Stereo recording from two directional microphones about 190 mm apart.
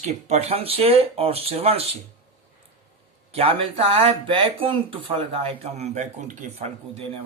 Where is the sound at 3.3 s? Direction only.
30° right (ahead or behind).